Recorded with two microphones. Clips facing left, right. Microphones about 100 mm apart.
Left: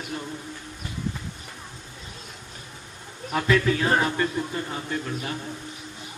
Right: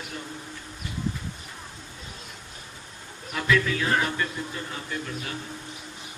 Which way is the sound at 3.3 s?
35° left (ahead or behind).